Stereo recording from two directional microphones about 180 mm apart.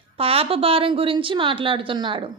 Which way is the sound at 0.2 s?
30° right (ahead or behind).